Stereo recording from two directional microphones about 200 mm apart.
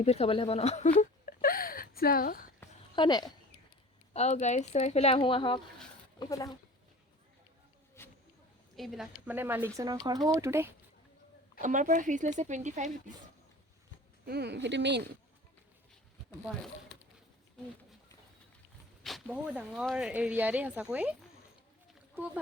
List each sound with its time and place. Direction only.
0.0 s speech: 30° left (ahead or behind)
2.9 s speech: 20° left (ahead or behind)
4.1 s speech: 35° left (ahead or behind); by 6.6 s 15° left (ahead or behind)
8.0 s a sound: 15° left (ahead or behind)
8.7 s speech: centre (ahead or behind)
11.6 s speech: 40° right (ahead or behind)
14.3 s speech: 55° right (ahead or behind)
19.0 s speech: 5° right (ahead or behind)